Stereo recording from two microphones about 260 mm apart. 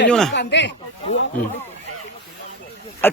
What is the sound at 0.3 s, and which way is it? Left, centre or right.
Speech, left.